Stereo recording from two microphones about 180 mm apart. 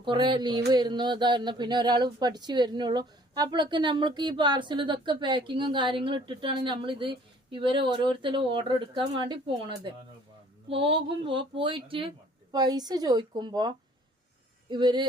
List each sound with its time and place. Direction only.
0.0 s speech: 25° right (ahead or behind)